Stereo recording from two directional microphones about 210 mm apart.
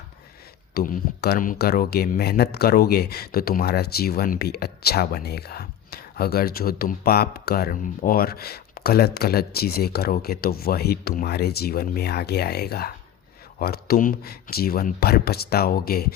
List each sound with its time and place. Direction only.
0.7 s speech: 45° left (ahead or behind)